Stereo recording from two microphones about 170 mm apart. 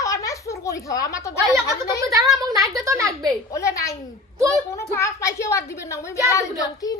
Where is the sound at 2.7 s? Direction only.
20° right (ahead or behind).